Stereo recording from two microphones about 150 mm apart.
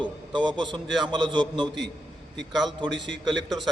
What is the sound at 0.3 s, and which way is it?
Speech, 30° right (ahead or behind).